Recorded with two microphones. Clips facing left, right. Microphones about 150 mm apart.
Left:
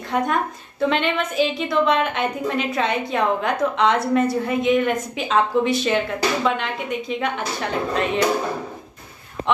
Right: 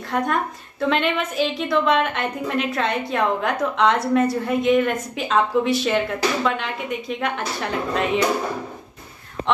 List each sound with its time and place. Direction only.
0.1 s a woman's voice: centre (ahead or behind)